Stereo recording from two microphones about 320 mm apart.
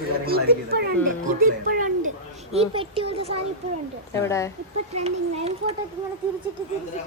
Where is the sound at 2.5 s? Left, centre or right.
Centre.